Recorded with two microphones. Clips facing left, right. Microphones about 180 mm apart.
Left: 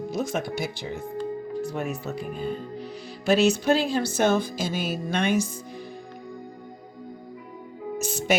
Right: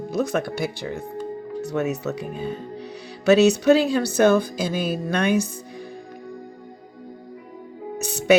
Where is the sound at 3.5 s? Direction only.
70° right (ahead or behind).